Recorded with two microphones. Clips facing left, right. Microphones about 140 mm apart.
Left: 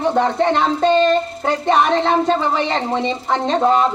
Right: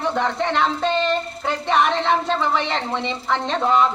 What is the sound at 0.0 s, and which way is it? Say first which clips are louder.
Speech: left 6 dB; 35° left (ahead or behind).